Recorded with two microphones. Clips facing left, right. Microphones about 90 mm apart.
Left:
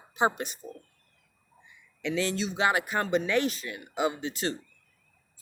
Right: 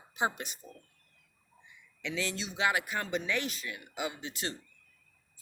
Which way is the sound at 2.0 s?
45° left (ahead or behind).